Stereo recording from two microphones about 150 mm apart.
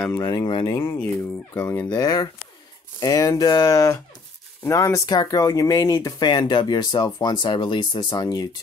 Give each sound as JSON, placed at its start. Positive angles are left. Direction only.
{"t": 0.2, "sound": "speech", "side_deg": 30}
{"t": 0.7, "sound": "speech", "side_deg": 15}